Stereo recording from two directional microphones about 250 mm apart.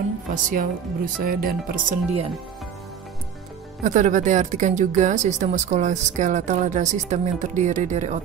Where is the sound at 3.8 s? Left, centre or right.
Right.